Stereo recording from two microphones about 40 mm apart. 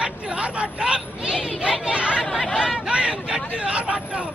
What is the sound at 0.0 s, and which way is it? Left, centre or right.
Hubbub, right.